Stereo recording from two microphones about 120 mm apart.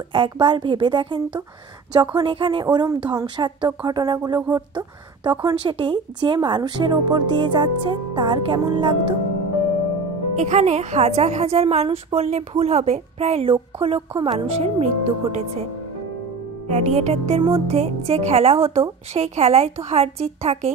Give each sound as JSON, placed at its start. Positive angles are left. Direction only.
{"t": 0.1, "sound": "speech", "side_deg": -45}
{"t": 10.3, "sound": "a woman's voice", "side_deg": -80}
{"t": 16.6, "sound": "a woman's voice", "side_deg": -70}